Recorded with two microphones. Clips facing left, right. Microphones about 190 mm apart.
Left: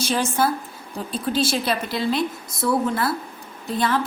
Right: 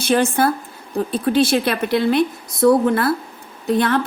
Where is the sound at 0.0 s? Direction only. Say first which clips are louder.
Right 5 dB; 60° right (ahead or behind).